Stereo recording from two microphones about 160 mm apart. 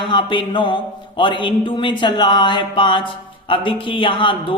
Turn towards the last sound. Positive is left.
turn(degrees=30)  # may be behind; listen again after turning